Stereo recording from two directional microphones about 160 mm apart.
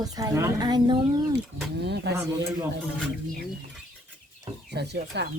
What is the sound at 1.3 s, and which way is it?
Speech, 90° right.